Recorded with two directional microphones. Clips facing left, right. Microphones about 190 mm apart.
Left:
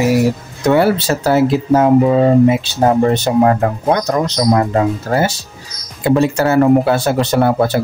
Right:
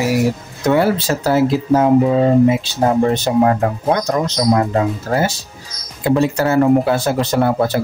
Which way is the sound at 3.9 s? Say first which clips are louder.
Left 2 dB; 65° left (ahead or behind).